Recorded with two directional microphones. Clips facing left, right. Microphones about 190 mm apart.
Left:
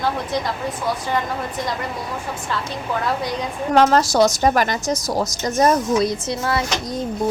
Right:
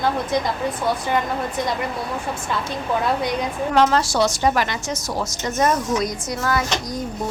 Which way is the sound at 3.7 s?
45° left (ahead or behind).